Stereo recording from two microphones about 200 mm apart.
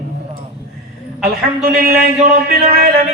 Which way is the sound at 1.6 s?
50° right (ahead or behind).